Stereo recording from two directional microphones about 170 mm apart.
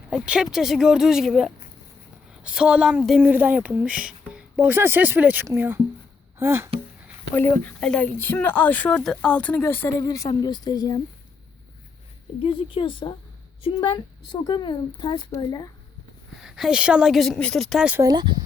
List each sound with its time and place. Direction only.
0.1 s a woman's voice: 5° right (ahead or behind)
7.3 s a woman's voice: 10° left (ahead or behind)
12.4 s a woman's voice: 30° left (ahead or behind)
16.4 s a woman's voice: 5° right (ahead or behind)
18.0 s speech: 25° right (ahead or behind)